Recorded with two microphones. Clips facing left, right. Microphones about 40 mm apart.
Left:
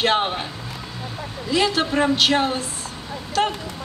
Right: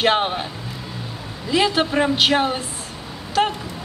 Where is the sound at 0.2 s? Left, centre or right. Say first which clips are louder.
Right 1 dB; centre.